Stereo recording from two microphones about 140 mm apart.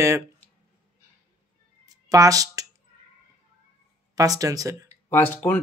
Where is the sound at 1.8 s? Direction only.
25° right (ahead or behind).